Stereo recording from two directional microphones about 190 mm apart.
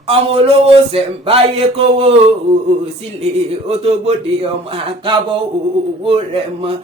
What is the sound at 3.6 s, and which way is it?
A man's voice, 30° right (ahead or behind).